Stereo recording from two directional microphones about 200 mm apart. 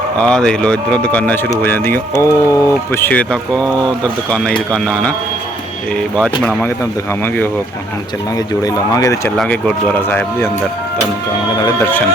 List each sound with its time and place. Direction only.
0.2 s speech: 5° left (ahead or behind)
8.6 s speech: 15° left (ahead or behind)
9.4 s speech: 5° left (ahead or behind)